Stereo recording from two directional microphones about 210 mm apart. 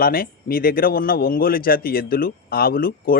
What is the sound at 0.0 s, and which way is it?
Speech, 45° left (ahead or behind).